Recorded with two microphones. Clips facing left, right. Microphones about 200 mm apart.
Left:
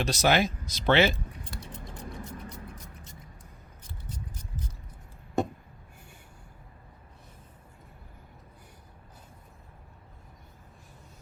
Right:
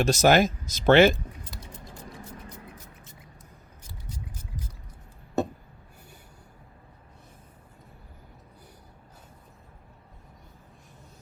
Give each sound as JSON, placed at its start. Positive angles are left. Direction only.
{"t": 0.0, "sound": "speech", "side_deg": -45}